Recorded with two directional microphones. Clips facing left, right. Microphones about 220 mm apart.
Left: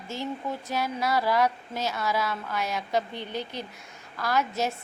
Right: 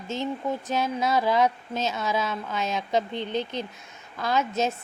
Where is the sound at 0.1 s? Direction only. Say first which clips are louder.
Right 4 dB; 20° right (ahead or behind).